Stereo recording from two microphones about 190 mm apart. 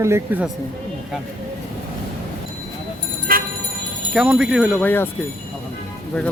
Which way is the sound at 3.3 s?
50° right (ahead or behind).